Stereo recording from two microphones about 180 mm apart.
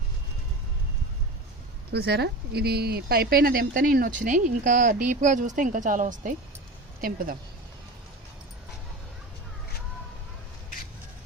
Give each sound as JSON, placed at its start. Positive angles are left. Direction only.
{"t": 1.9, "sound": "speech", "side_deg": -65}